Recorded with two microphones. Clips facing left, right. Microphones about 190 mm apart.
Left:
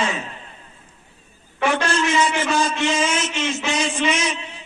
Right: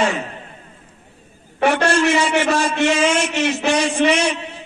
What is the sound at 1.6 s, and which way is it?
A man's voice, 65° right (ahead or behind).